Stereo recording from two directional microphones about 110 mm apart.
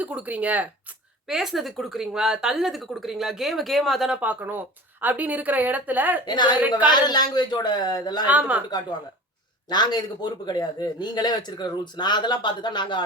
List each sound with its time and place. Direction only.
0.0 s a woman's voice: 15° right (ahead or behind)
1.3 s a woman's voice: 5° right (ahead or behind)
4.2 s a woman's voice: 15° right (ahead or behind)
6.2 s speech: 40° left (ahead or behind)
8.3 s a woman's voice: 15° right (ahead or behind)
9.6 s speech: 40° left (ahead or behind)